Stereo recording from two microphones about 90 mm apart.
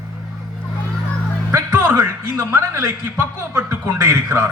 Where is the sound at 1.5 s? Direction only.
25° right (ahead or behind).